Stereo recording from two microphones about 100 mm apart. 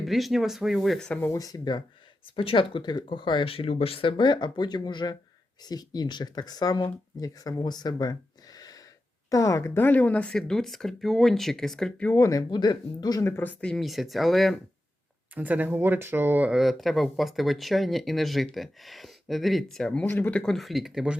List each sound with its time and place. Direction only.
0.0 s speech: centre (ahead or behind)
1.2 s speech: 35° left (ahead or behind)
2.3 s speech: 65° left (ahead or behind); by 8.1 s 45° left (ahead or behind)
8.5 s gasp: 40° left (ahead or behind)
9.3 s speech: 35° left (ahead or behind)
9.7 s speech: 20° left (ahead or behind)
12.0 s speech: 30° left (ahead or behind)
13.2 s speech: 20° left (ahead or behind); by 14.6 s centre (ahead or behind)
15.4 s speech: 15° right (ahead or behind)
16.6 s speech: centre (ahead or behind)
20.1 s speech: 20° left (ahead or behind)
20.4 s speech: centre (ahead or behind)